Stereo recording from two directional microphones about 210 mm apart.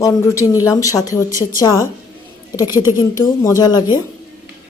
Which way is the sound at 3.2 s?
15° left (ahead or behind).